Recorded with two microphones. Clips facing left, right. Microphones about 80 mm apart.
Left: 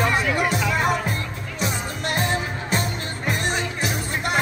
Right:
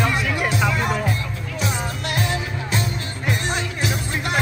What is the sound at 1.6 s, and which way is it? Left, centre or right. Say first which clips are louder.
Music: even; left.